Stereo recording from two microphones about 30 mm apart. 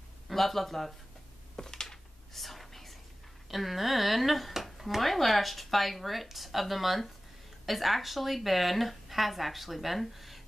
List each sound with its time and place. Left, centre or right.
0.3 s speech: centre
1.6 s a sound: centre
2.3 s whispering: centre
3.4 s speech: centre